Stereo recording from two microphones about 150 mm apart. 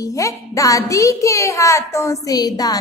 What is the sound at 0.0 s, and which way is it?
A child's voice, 20° left (ahead or behind).